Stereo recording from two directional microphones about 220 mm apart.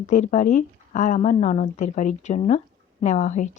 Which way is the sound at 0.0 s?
35° left (ahead or behind).